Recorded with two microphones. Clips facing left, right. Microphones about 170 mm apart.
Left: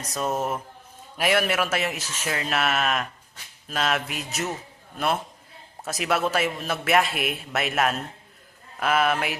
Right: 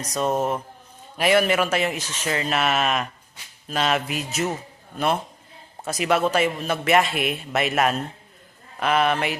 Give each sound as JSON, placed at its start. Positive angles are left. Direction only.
{"t": 0.1, "sound": "a man's voice", "side_deg": 0}